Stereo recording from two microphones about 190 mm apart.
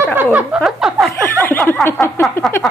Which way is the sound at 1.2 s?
10° left (ahead or behind).